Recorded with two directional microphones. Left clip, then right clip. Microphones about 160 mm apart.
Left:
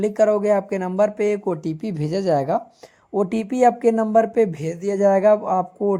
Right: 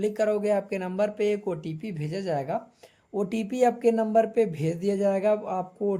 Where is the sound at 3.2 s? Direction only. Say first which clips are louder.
Left 6 dB; 30° left (ahead or behind).